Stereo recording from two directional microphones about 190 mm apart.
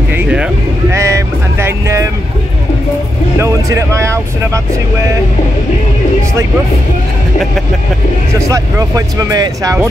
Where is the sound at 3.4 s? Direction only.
15° right (ahead or behind).